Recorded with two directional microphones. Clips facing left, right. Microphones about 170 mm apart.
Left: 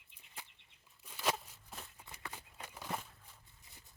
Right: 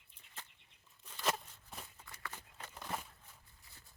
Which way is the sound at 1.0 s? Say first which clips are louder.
Left 1 dB; 10° left (ahead or behind).